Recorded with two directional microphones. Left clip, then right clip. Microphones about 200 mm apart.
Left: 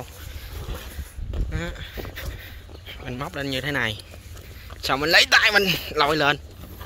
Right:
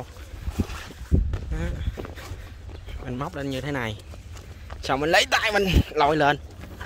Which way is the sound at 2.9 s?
15° right (ahead or behind).